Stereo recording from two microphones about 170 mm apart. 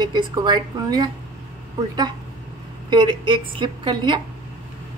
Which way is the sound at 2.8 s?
25° right (ahead or behind).